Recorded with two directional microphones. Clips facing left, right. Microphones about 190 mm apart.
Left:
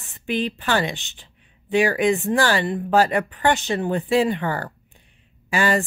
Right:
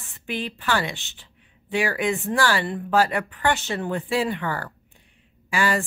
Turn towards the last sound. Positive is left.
turn(degrees=20)  # may be behind; listen again after turning